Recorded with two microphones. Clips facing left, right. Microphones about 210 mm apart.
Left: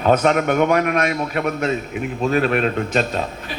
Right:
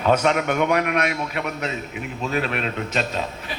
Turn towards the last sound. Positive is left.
turn(degrees=45)  # may be behind; listen again after turning